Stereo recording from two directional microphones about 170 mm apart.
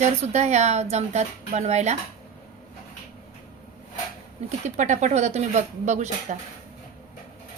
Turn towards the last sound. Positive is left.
turn(degrees=-45)  # may be behind; listen again after turning